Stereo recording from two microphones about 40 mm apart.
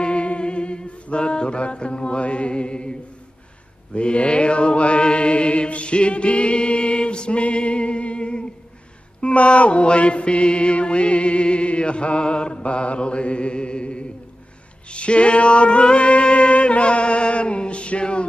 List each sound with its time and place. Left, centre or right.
0.0 s mantra: left